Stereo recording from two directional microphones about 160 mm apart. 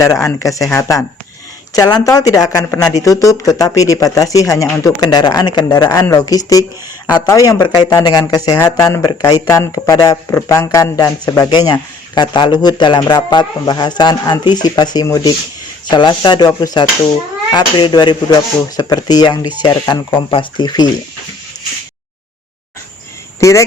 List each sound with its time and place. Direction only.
0.0 s speech: 20° left (ahead or behind)
23.4 s speech: 20° left (ahead or behind)